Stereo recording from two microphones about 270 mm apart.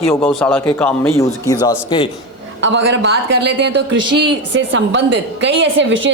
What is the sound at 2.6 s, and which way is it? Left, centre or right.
A woman's voice, right.